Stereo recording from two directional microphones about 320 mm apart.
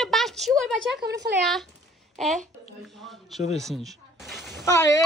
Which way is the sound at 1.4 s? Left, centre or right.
Centre.